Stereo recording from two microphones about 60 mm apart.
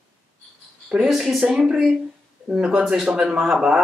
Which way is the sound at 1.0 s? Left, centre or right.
Centre.